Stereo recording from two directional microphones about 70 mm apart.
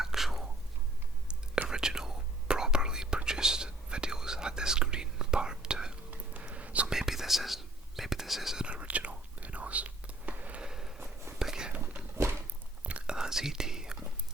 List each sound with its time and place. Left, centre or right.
0.0 s whispering: centre
1.6 s whispering: centre
6.1 s whispering: right
6.9 s whispering: centre
8.6 s whispering: centre
12.1 s a sound: right
12.8 s whispering: centre